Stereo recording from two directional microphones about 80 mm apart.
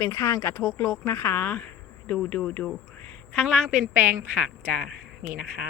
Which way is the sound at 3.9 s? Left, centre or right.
Right.